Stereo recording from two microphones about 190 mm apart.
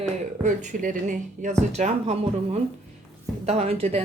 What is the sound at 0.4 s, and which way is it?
Speech, 40° right (ahead or behind).